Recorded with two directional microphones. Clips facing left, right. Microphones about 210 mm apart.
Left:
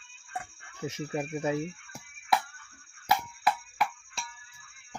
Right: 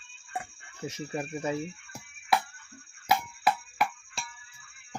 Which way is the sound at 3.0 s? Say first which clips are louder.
Right 1 dB; 10° right (ahead or behind).